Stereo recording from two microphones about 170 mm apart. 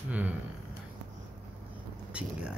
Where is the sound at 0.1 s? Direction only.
10° right (ahead or behind).